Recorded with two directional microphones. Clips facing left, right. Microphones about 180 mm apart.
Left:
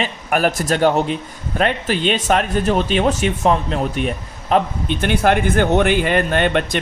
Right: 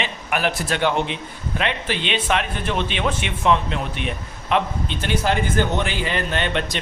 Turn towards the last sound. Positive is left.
turn(degrees=50)  # may be behind; listen again after turning